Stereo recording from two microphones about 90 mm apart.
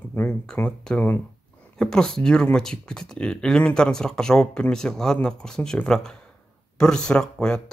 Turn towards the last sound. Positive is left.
turn(degrees=10)  # may be behind; listen again after turning